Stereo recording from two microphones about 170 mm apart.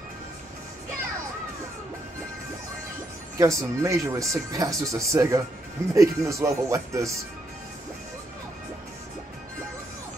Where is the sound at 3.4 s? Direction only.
20° right (ahead or behind).